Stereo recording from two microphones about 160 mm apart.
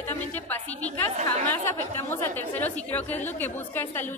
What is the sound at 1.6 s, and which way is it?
A woman's voice, 15° left (ahead or behind).